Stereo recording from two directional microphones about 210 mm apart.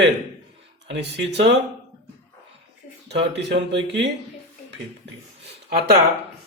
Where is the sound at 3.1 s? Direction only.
55° right (ahead or behind).